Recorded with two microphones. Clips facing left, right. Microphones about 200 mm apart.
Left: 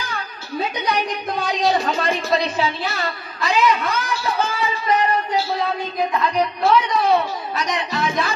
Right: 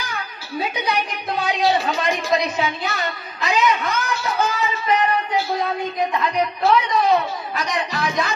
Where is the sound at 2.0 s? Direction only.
30° left (ahead or behind).